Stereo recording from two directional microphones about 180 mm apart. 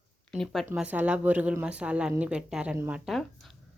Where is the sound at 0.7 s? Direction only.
10° right (ahead or behind).